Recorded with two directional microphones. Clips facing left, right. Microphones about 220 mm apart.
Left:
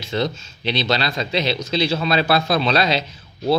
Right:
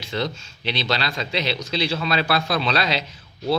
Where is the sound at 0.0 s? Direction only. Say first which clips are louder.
Left 4 dB; 20° left (ahead or behind).